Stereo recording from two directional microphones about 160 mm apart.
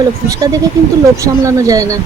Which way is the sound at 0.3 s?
20° right (ahead or behind).